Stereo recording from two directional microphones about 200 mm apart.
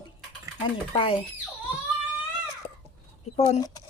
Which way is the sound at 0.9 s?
25° left (ahead or behind).